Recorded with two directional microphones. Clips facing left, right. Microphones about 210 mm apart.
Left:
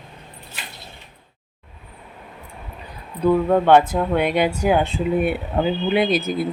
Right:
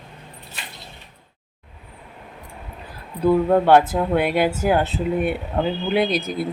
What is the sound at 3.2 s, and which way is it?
Speech, 5° right (ahead or behind).